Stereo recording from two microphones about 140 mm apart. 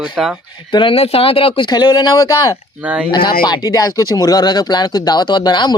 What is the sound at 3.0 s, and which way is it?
Speech, 35° left (ahead or behind).